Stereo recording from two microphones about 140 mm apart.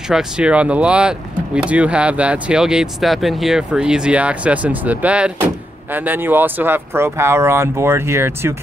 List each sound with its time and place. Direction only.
0.1 s speech: 5° right (ahead or behind)